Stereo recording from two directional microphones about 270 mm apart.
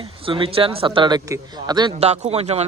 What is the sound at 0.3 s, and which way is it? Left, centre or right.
A man's voice, centre.